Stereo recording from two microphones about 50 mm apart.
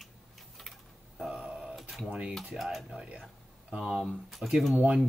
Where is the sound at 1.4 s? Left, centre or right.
Centre.